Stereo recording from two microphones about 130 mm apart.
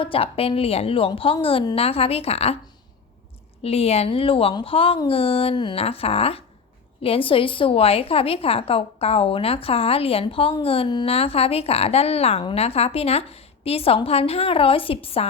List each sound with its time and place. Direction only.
0.0 s a woman's voice: 45° left (ahead or behind)
3.6 s a woman's voice: 50° left (ahead or behind)